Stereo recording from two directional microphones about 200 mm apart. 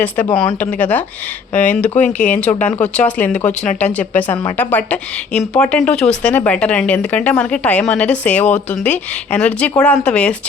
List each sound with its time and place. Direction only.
0.0 s speech: 10° left (ahead or behind)
1.9 s speech: 35° left (ahead or behind)
2.1 s speech: 10° left (ahead or behind)